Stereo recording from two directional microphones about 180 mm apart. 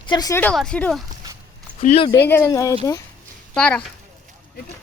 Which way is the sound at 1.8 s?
35° left (ahead or behind).